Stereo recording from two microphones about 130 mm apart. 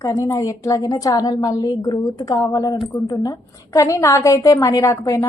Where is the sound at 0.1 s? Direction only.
25° left (ahead or behind).